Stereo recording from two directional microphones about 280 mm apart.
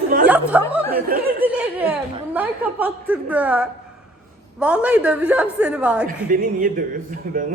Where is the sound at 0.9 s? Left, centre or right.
Right.